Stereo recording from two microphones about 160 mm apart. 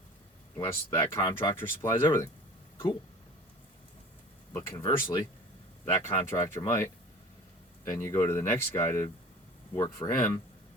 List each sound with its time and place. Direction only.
0.5 s speech: 20° left (ahead or behind)
4.5 s speech: 20° left (ahead or behind)
6.3 s speech: 20° left (ahead or behind)